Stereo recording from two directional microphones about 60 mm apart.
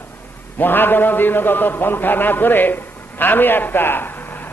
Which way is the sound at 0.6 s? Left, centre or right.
Left.